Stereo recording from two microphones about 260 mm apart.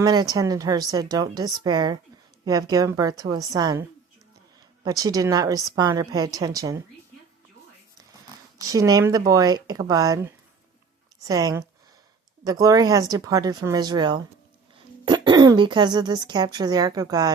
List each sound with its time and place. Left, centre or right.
0.0 s speech: centre
8.6 s speech: centre